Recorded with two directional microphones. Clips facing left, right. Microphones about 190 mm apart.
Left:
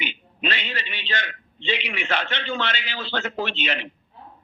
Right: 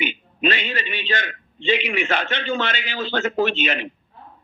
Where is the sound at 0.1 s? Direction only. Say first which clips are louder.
Right 6 dB; 50° right (ahead or behind).